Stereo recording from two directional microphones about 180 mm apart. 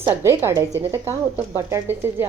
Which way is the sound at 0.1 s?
15° right (ahead or behind).